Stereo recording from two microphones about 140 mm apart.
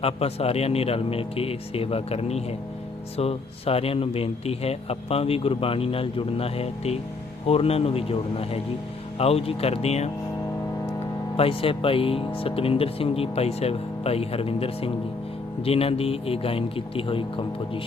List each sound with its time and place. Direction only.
0.0 s a man's voice: 45° left (ahead or behind)
11.3 s a man's voice: 40° left (ahead or behind)